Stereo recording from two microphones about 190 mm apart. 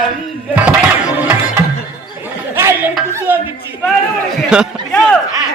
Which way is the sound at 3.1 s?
10° right (ahead or behind).